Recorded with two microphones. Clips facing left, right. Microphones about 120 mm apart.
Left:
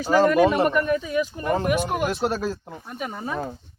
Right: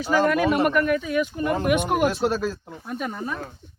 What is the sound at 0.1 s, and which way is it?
Speech, 30° left (ahead or behind).